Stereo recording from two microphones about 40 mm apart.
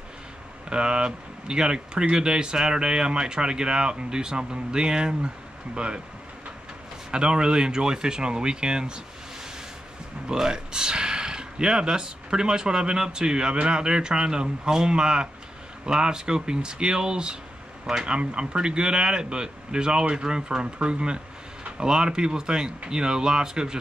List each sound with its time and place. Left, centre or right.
0.7 s speech: right
7.1 s speech: right
10.2 s speech: centre
18.1 s speech: right